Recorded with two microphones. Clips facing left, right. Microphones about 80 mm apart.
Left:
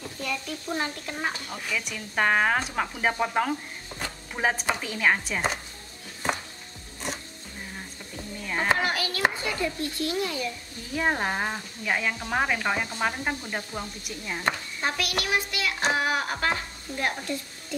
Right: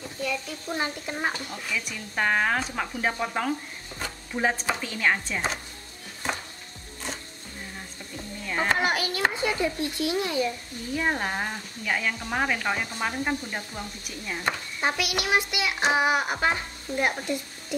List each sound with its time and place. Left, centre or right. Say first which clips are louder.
0.2 s speech: right 2 dB; centre
1.0 s a child's voice: right 2 dB; centre
1.9 s speech: left 2 dB; centre
8.5 s a sound: even; centre
8.8 s children playing: right 2 dB; right
9.4 s a child's voice: right 3 dB; right
11.0 s speech: left 2 dB; centre
14.8 s a child's voice: right 2 dB; centre
15.9 s stir: right 4 dB; centre